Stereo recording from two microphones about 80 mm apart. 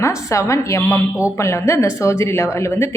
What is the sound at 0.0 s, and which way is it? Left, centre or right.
A woman's voice, left.